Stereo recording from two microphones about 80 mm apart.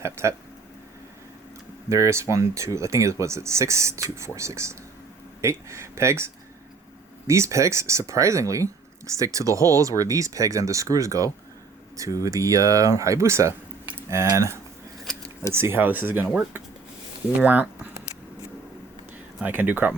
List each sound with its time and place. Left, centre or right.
0.0 s speech: right
1.9 s speech: right
7.3 s speech: right
17.4 s speech: centre
19.4 s speech: right